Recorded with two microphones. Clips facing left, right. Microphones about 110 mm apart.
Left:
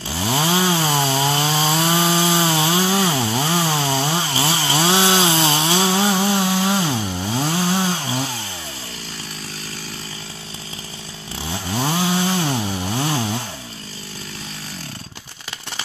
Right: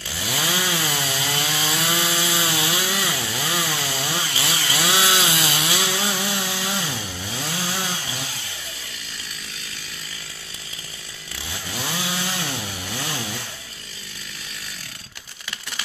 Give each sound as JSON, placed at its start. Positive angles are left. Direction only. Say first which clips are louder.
{"t": 0.1, "sound": "chainsaw", "louder": "left 7 dB", "side_deg": 30}
{"t": 11.4, "sound": "chainsaw", "louder": "left 8 dB", "side_deg": 30}